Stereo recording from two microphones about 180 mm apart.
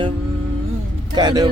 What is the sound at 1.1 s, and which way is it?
Speech, 25° right (ahead or behind).